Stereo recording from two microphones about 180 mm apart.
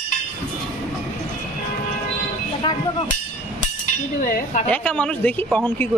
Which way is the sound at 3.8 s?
45° left (ahead or behind).